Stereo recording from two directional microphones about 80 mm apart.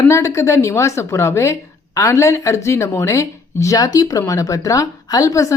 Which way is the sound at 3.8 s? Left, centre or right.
Left.